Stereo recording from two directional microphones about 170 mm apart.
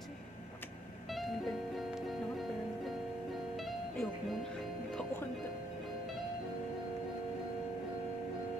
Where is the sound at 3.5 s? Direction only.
Centre (ahead or behind).